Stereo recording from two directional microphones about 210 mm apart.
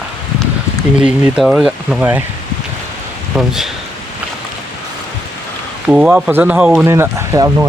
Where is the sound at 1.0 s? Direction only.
5° right (ahead or behind).